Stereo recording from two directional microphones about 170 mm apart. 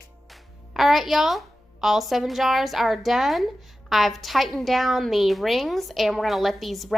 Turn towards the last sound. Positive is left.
turn(degrees=0)  # may be behind; listen again after turning